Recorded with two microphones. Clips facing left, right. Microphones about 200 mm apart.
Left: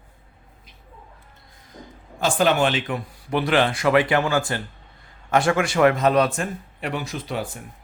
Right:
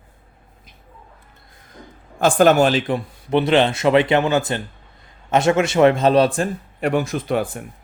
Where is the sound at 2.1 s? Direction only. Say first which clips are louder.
Right 6 dB; 50° right (ahead or behind); by 6.5 s 30° right (ahead or behind).